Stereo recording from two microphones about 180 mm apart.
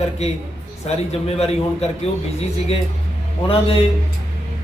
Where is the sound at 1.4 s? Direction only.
35° left (ahead or behind).